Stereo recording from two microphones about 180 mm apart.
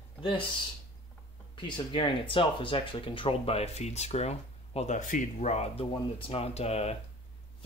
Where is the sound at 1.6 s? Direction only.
30° left (ahead or behind).